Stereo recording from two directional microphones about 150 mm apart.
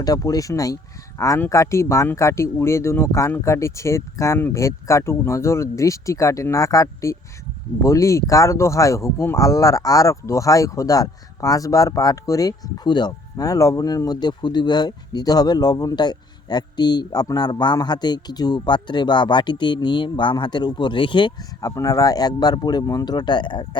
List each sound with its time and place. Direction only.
0.0 s speech: 25° left (ahead or behind)